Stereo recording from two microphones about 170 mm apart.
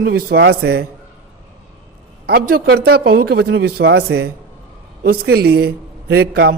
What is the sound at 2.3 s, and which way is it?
A man's voice, 60° right (ahead or behind).